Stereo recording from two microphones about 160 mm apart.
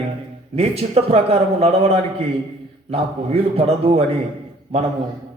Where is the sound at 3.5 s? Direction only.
35° right (ahead or behind).